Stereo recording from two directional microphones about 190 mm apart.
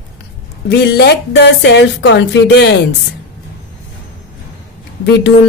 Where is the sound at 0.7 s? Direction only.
60° left (ahead or behind).